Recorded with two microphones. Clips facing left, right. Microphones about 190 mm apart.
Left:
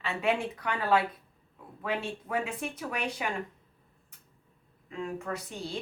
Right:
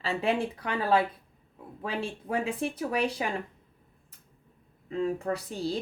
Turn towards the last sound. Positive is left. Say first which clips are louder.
# right 6 dB
turn(degrees=-35)  # may be behind; listen again after turning